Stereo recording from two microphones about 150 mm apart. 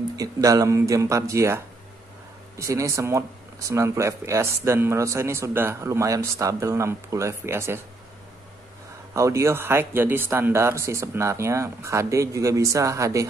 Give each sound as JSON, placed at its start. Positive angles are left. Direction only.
{"t": 0.1, "sound": "speech", "side_deg": -25}
{"t": 9.1, "sound": "speech", "side_deg": -20}